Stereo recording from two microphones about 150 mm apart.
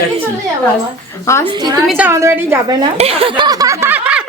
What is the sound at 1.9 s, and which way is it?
Speech, 10° right (ahead or behind).